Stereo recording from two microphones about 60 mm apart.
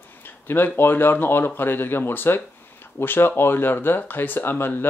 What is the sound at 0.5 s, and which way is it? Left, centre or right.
Speech, left.